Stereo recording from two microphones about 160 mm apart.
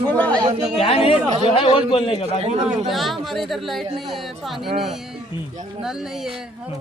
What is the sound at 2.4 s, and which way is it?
Speech, 45° right (ahead or behind).